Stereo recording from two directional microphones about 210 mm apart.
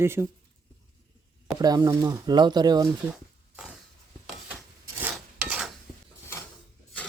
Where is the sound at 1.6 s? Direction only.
20° right (ahead or behind).